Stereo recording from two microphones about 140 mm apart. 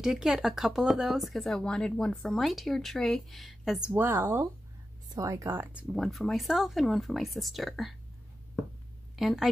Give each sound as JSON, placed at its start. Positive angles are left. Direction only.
{"t": 0.0, "sound": "speech", "side_deg": -5}
{"t": 3.9, "sound": "speech", "side_deg": -15}
{"t": 5.9, "sound": "speech", "side_deg": 0}
{"t": 9.1, "sound": "a woman's voice", "side_deg": 0}